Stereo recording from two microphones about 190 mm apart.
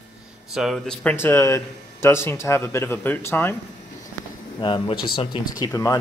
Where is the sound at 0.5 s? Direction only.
Centre (ahead or behind).